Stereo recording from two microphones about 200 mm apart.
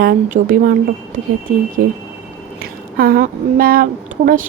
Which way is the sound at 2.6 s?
50° right (ahead or behind).